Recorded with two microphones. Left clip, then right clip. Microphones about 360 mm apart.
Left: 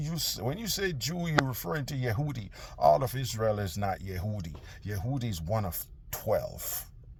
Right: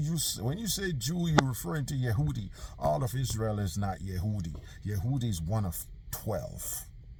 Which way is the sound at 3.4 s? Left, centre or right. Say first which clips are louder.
Left 6 dB; left.